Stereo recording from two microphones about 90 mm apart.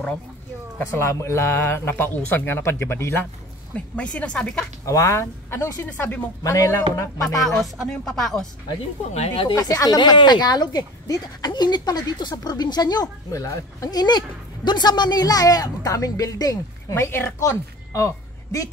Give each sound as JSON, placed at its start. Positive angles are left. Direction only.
{"t": 0.7, "sound": "speech", "side_deg": 30}
{"t": 3.7, "sound": "speech", "side_deg": 15}
{"t": 4.8, "sound": "speech", "side_deg": 35}
{"t": 5.9, "sound": "speech", "side_deg": 20}
{"t": 6.4, "sound": "speech", "side_deg": 35}
{"t": 7.4, "sound": "speech", "side_deg": 0}
{"t": 9.3, "sound": "speech", "side_deg": 65}
{"t": 9.6, "sound": "speech", "side_deg": 40}
{"t": 16.9, "sound": "a woman's voice", "side_deg": 25}